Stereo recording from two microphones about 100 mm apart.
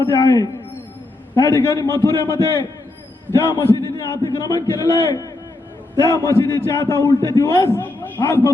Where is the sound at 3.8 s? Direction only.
40° left (ahead or behind).